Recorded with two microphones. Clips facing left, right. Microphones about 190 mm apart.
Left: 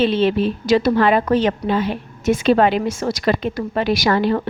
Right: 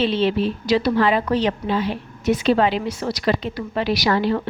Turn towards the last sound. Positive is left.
turn(degrees=50)  # may be behind; listen again after turning